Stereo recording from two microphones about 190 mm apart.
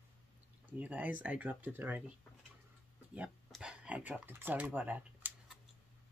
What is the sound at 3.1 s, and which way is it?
Speech, 5° right (ahead or behind).